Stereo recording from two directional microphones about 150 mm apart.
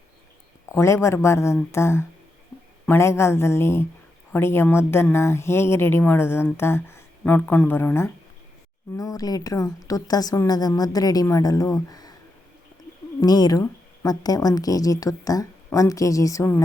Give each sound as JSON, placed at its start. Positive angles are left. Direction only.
{"t": 0.7, "sound": "speech", "side_deg": 20}
{"t": 13.2, "sound": "speech", "side_deg": 25}